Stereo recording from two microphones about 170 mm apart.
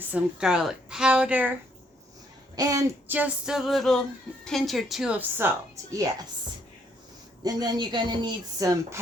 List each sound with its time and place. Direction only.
0.1 s speech: 5° right (ahead or behind)
2.6 s speech: 20° right (ahead or behind)
7.4 s a woman's voice: 25° right (ahead or behind)